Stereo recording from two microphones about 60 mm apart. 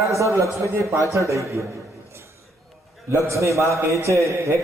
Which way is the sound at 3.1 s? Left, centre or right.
Right.